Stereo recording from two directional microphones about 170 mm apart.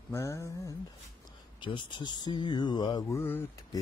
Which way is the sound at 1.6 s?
25° left (ahead or behind).